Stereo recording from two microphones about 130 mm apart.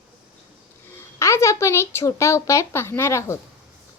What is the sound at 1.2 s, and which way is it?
Speech, 20° left (ahead or behind).